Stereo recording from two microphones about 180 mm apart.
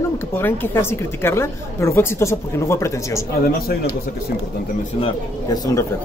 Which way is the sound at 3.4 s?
55° left (ahead or behind).